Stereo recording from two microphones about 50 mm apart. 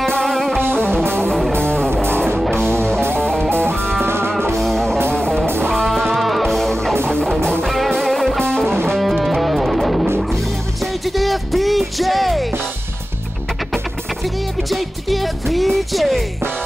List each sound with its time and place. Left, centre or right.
0.2 s music: centre
0.6 s music: right
1.6 s music: centre
3.2 s music: centre
4.0 s music: right
4.6 s music: centre
5.1 s music: centre
8.9 s music: centre
14.7 s music: centre